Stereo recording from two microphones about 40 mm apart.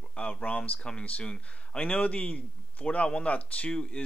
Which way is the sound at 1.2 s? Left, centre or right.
Left.